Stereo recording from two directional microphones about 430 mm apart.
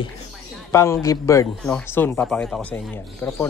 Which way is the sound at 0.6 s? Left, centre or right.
Centre.